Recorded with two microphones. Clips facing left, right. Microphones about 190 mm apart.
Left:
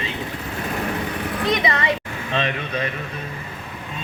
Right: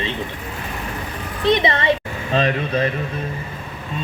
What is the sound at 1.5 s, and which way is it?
Speech, 30° right (ahead or behind).